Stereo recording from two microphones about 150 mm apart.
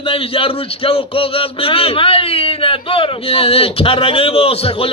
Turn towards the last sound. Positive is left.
turn(degrees=40)  # may be behind; listen again after turning